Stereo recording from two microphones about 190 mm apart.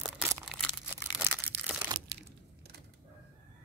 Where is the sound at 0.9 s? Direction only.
10° right (ahead or behind).